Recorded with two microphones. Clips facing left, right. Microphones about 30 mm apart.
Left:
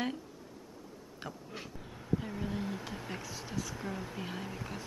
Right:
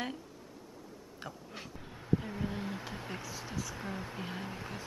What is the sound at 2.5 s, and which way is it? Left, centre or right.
Speech, centre.